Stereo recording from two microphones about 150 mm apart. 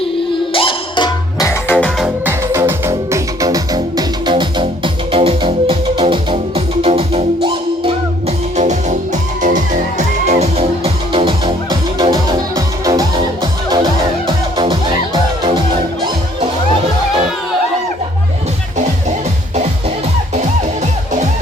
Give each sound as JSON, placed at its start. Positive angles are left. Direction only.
{"t": 0.5, "sound": "music", "side_deg": 35}
{"t": 1.5, "sound": "music", "side_deg": 15}
{"t": 2.2, "sound": "music", "side_deg": -15}
{"t": 8.5, "sound": "music", "side_deg": -50}